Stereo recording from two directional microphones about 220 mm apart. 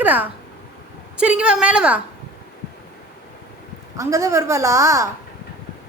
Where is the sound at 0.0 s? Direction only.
5° right (ahead or behind).